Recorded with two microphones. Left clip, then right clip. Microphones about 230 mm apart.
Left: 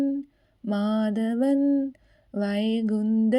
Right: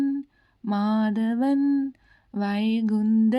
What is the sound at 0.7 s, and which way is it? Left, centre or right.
Mantra, right.